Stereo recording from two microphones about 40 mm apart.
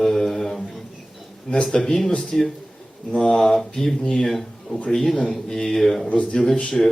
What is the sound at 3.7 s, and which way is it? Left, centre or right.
Speech, centre.